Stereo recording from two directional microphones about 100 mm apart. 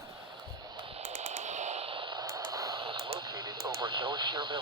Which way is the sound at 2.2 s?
25° right (ahead or behind).